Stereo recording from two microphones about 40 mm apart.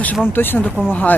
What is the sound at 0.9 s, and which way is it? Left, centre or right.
Speech, left.